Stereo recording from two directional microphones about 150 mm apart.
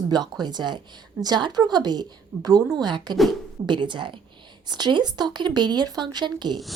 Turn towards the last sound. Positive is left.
turn(degrees=-30)  # may be behind; listen again after turning